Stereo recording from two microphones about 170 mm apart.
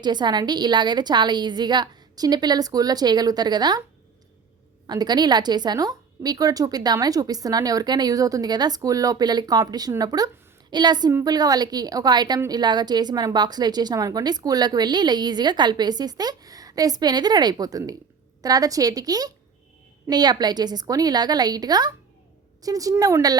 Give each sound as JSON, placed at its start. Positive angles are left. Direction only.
{"t": 0.0, "sound": "a woman's voice", "side_deg": -25}
{"t": 4.9, "sound": "a woman's voice", "side_deg": -25}